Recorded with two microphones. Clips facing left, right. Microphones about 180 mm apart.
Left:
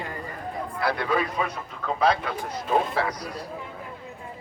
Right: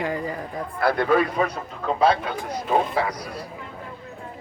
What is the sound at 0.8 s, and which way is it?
Speech, 50° right (ahead or behind).